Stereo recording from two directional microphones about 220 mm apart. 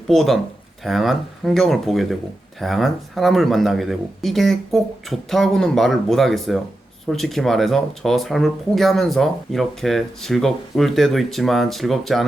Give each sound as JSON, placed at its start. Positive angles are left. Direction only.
{"t": 0.1, "sound": "speech", "side_deg": 0}